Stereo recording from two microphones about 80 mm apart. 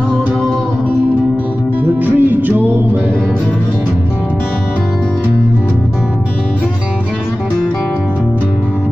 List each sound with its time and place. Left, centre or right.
2.0 s music: right